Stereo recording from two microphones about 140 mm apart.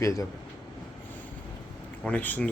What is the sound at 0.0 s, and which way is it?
Speech, 20° left (ahead or behind).